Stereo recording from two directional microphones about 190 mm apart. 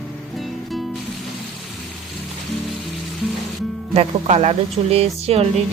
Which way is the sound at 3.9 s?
35° right (ahead or behind).